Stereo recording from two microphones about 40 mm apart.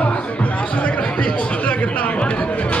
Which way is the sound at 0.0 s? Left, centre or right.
Left.